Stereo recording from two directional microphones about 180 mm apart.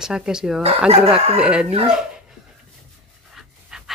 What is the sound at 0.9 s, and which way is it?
Speech, 35° right (ahead or behind).